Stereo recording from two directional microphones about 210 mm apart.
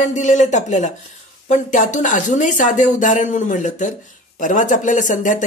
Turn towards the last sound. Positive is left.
turn(degrees=35)  # may be behind; listen again after turning